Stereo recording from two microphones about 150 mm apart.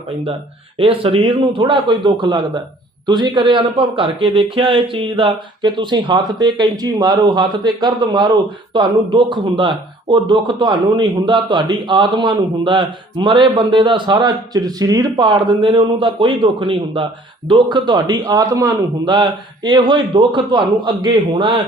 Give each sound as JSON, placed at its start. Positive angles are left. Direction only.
{"t": 0.8, "sound": "a man's voice", "side_deg": -40}